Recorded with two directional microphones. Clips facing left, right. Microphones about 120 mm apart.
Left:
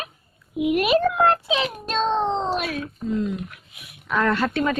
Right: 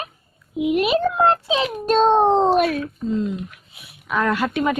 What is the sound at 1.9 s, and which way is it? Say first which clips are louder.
Speech: right 8 dB; 50° right (ahead or behind).